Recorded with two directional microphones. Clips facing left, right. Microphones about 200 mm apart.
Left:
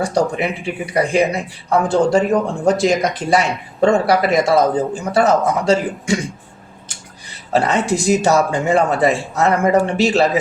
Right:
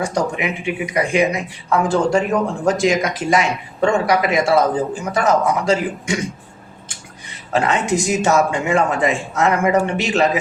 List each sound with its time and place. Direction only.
0.0 s speech: 35° left (ahead or behind)
7.5 s speech: 35° left (ahead or behind)